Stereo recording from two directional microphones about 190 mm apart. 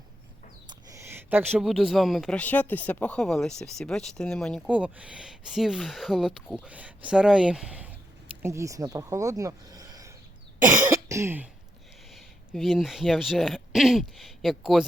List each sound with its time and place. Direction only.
0.7 s speech: 15° right (ahead or behind)
10.8 s cough: 15° right (ahead or behind)
12.1 s speech: centre (ahead or behind)